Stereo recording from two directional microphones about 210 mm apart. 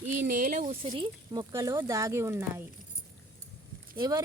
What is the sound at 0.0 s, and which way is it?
Speech, 35° right (ahead or behind).